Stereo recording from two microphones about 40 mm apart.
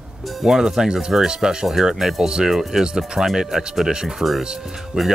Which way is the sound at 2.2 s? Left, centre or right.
Right.